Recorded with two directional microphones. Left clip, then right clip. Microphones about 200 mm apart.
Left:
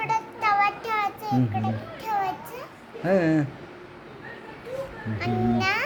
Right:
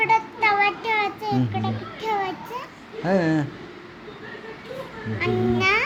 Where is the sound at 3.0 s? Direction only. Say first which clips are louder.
Even; 15° left (ahead or behind).